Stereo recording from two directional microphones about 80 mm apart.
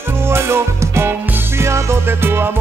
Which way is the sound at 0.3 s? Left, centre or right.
Right.